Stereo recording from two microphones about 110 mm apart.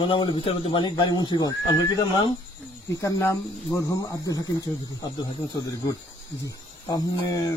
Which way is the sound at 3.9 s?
35° left (ahead or behind).